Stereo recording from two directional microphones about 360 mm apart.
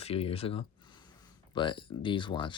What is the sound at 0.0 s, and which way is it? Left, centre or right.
Speech, centre.